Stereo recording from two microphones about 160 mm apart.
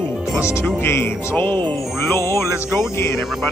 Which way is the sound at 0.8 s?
15° left (ahead or behind).